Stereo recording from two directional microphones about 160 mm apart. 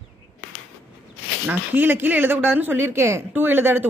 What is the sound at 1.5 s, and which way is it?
Speech, 10° right (ahead or behind).